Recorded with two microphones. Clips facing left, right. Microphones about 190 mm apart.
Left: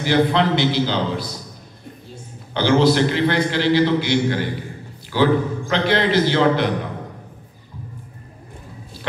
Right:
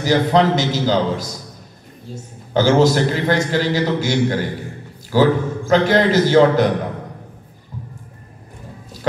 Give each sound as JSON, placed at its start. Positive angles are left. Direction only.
{"t": 0.0, "sound": "a man's voice", "side_deg": -40}